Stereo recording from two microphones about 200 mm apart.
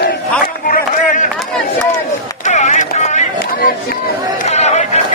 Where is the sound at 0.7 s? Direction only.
40° left (ahead or behind).